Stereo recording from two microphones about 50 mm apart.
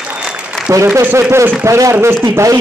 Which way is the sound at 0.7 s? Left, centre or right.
Right.